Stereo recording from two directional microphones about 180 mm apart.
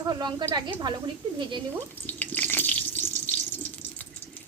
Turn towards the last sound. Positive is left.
turn(degrees=10)  # may be behind; listen again after turning